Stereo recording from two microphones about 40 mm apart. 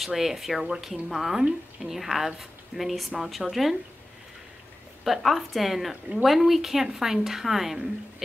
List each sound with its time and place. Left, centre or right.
0.0 s speech: centre
5.0 s a woman's voice: centre